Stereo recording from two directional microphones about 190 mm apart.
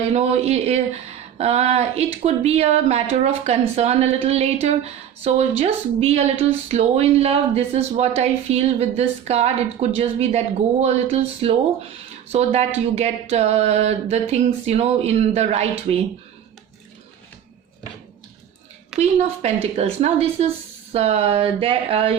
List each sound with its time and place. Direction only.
0.1 s a woman's voice: 35° right (ahead or behind)
19.7 s a woman's voice: 35° right (ahead or behind)